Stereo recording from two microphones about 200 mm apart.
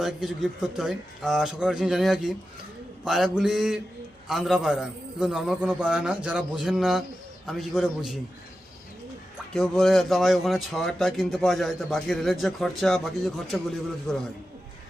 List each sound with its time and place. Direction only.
0.0 s speech: centre (ahead or behind)
9.6 s speech: centre (ahead or behind)